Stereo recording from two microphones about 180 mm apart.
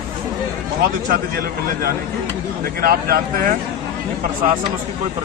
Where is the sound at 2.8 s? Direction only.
55° right (ahead or behind).